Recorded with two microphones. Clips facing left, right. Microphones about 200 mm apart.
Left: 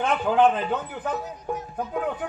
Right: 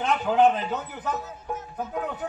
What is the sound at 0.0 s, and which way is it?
Speech, 55° left (ahead or behind).